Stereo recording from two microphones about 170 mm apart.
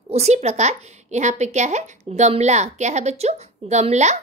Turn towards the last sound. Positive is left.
turn(degrees=-40)  # may be behind; listen again after turning